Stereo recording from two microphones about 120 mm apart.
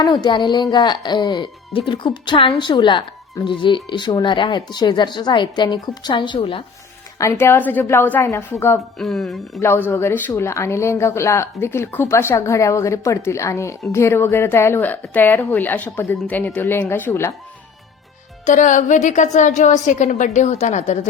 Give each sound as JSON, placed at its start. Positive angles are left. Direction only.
{"t": 0.0, "sound": "speech", "side_deg": 35}
{"t": 7.2, "sound": "speech", "side_deg": 20}
{"t": 9.0, "sound": "speech", "side_deg": 0}
{"t": 9.6, "sound": "a woman's voice", "side_deg": 20}
{"t": 18.4, "sound": "a woman's voice", "side_deg": 90}